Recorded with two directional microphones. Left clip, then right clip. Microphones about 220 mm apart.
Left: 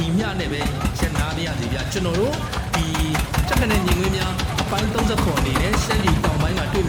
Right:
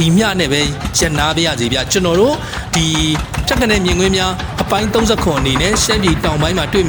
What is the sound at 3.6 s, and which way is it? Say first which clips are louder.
Speech: right 8 dB; 45° right (ahead or behind).